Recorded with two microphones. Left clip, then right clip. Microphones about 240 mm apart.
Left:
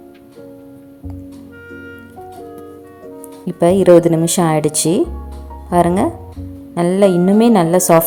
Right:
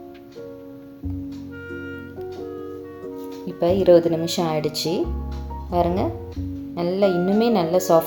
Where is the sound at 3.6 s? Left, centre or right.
Left.